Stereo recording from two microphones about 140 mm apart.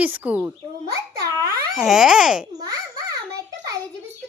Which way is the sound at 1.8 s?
5° right (ahead or behind).